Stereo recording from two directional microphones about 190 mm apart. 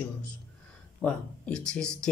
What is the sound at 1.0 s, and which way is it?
Speech, 5° left (ahead or behind).